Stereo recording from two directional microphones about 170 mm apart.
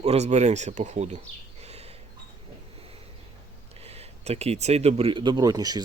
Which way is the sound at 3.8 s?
35° right (ahead or behind).